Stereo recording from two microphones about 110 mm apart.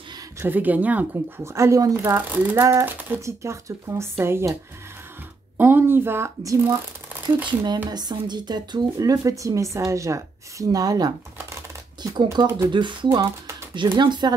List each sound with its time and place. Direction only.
0.4 s speech: 15° right (ahead or behind)
1.5 s speech: 25° right (ahead or behind)
2.0 s speech: 20° right (ahead or behind)
5.6 s speech: 20° right (ahead or behind)
7.4 s a woman's voice: 40° right (ahead or behind)